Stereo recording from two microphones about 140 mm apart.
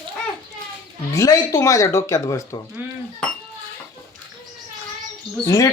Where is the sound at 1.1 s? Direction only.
25° left (ahead or behind).